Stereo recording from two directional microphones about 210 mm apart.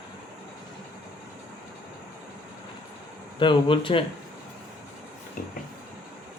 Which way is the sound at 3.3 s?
25° left (ahead or behind).